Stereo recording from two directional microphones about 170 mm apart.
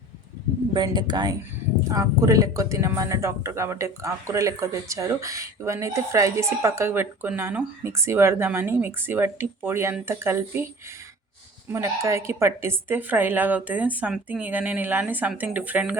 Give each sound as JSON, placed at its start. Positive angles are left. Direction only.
{"t": 0.7, "sound": "speech", "side_deg": -25}
{"t": 11.7, "sound": "speech", "side_deg": -15}